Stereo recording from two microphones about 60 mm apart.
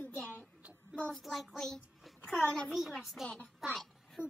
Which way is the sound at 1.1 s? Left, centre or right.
Centre.